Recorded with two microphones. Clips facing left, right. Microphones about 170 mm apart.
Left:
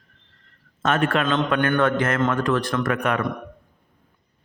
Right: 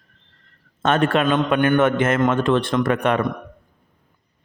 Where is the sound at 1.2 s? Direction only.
15° right (ahead or behind).